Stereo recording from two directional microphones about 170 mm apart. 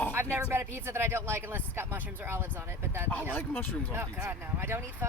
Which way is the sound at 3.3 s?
10° left (ahead or behind).